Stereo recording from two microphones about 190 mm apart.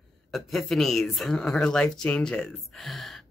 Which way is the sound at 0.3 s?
Centre (ahead or behind).